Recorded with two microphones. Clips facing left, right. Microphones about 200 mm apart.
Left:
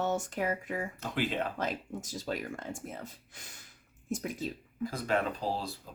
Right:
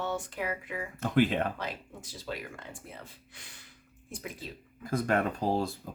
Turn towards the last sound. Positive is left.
turn(degrees=-50)  # may be behind; listen again after turning